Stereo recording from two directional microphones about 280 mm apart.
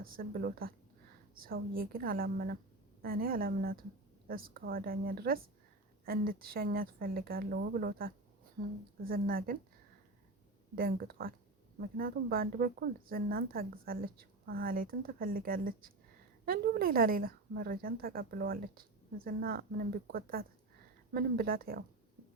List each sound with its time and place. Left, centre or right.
0.0 s speech: right
10.8 s speech: right